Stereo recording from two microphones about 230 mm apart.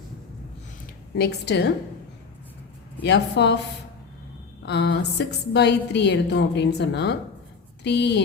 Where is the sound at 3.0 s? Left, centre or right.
Left.